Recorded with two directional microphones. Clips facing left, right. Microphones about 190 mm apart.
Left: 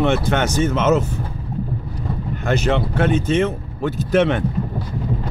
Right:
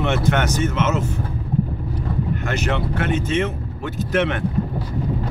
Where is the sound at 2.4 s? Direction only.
30° left (ahead or behind).